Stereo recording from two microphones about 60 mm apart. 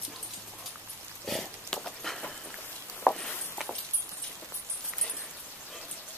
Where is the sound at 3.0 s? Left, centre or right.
Centre.